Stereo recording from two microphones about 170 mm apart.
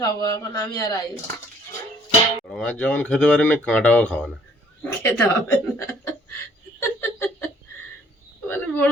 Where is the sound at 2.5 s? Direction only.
5° left (ahead or behind).